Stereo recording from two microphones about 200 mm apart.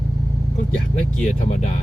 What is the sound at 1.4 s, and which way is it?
Speech, 35° left (ahead or behind).